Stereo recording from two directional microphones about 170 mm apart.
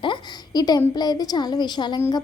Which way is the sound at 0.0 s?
25° left (ahead or behind).